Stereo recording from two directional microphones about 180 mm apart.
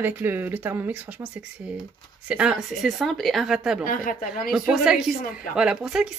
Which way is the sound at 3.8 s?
50° left (ahead or behind).